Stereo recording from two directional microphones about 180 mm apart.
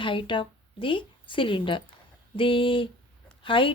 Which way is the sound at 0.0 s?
30° left (ahead or behind).